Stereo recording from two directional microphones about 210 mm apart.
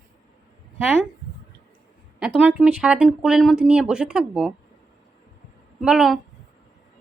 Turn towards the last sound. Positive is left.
turn(degrees=-5)  # may be behind; listen again after turning